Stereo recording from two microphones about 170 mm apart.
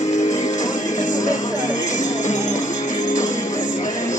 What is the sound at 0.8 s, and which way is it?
Music, 45° left (ahead or behind).